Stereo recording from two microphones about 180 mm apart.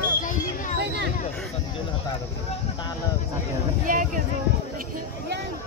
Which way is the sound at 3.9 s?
50° right (ahead or behind).